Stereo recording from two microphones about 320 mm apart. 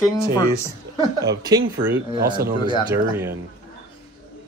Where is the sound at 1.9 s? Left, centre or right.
Right.